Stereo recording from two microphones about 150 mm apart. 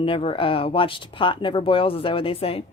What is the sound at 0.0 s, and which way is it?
A woman's voice, 40° left (ahead or behind).